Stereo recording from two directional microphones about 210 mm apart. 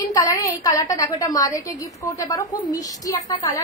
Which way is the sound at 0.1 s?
15° left (ahead or behind).